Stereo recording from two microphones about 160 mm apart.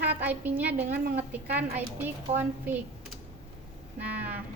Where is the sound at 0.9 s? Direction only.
80° right.